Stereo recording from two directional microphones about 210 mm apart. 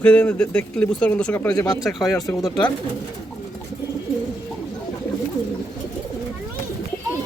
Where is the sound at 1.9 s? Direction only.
Centre (ahead or behind).